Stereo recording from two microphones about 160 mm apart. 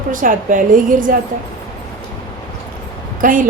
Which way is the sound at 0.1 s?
60° right (ahead or behind).